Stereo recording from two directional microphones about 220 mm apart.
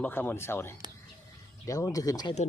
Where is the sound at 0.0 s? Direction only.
10° left (ahead or behind).